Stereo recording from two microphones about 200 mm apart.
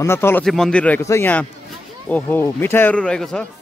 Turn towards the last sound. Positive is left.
turn(degrees=5)  # may be behind; listen again after turning